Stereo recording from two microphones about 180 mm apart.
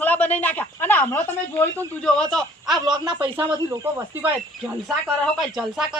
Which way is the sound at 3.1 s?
30° right (ahead or behind).